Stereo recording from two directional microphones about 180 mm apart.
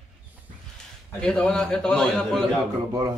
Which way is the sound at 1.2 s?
5° left (ahead or behind).